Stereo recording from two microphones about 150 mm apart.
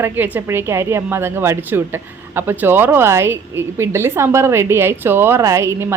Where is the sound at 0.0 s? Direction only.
15° right (ahead or behind).